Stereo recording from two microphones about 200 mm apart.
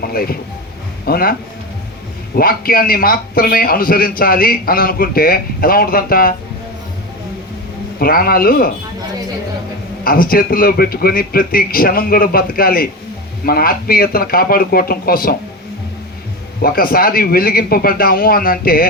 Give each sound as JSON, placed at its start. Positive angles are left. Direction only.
{"t": 0.0, "sound": "a man's voice", "side_deg": 50}
{"t": 7.9, "sound": "a man's voice", "side_deg": 50}
{"t": 10.0, "sound": "a man's voice", "side_deg": 45}
{"t": 16.6, "sound": "a man's voice", "side_deg": 45}